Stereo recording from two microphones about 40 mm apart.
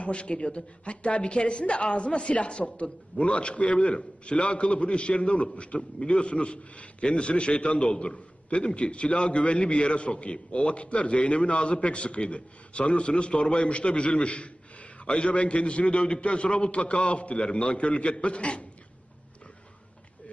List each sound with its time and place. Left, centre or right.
0.0 s a man's voice: left